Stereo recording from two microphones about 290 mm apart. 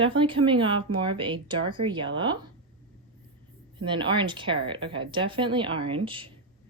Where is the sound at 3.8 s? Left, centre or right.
Centre.